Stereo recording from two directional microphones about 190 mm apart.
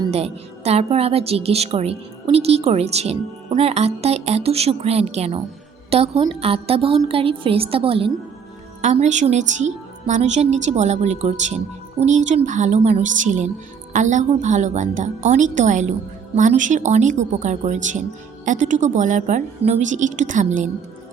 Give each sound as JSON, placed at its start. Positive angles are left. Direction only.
{"t": 0.0, "sound": "a woman's voice", "side_deg": -30}